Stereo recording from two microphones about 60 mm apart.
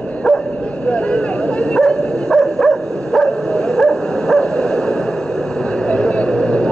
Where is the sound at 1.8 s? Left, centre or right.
Centre.